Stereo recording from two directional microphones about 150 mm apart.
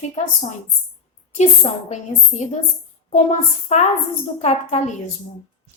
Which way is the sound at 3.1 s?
50° left (ahead or behind).